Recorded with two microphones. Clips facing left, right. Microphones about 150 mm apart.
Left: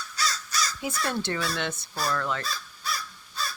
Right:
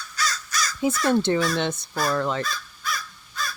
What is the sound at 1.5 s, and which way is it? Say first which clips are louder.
Speech: right 6 dB; 20° right (ahead or behind).